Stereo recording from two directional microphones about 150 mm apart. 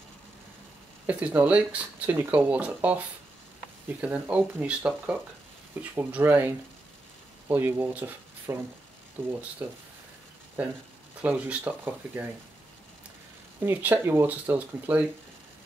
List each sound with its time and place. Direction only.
1.0 s speech: 10° right (ahead or behind)
11.1 s speech: 10° right (ahead or behind)
13.7 s speech: 15° right (ahead or behind)